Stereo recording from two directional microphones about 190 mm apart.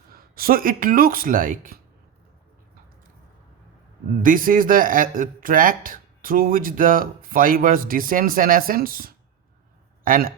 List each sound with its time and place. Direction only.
0.1 s speech: 50° right (ahead or behind)
4.2 s a man's voice: 45° right (ahead or behind)